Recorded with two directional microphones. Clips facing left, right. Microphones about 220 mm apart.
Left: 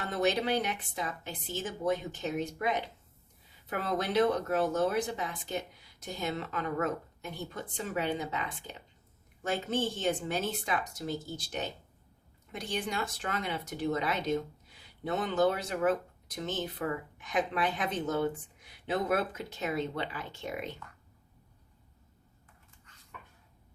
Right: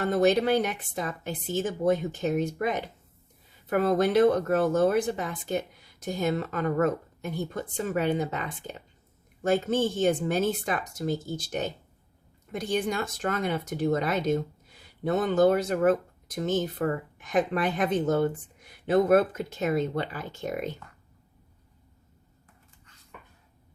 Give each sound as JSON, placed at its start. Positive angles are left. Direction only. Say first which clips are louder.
{"t": 0.0, "sound": "speech", "louder": "right 7 dB", "side_deg": -50}
{"t": 3.7, "sound": "speech", "louder": "right 9 dB", "side_deg": -50}